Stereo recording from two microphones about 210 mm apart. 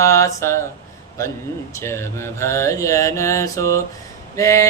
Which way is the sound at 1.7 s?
10° left (ahead or behind).